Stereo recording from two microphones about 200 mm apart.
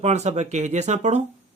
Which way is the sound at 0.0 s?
35° right (ahead or behind).